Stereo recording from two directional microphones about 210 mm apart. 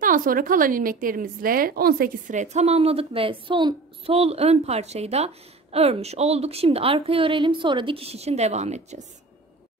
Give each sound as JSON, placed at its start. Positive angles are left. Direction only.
{"t": 0.0, "sound": "a woman's voice", "side_deg": -40}